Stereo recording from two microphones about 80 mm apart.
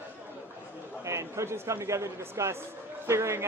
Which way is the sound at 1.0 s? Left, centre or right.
Right.